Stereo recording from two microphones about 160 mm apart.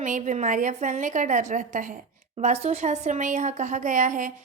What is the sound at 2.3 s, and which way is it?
Speech, 40° right (ahead or behind).